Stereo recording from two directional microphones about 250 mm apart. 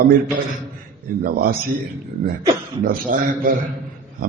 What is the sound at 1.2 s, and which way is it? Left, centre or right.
Speech, right.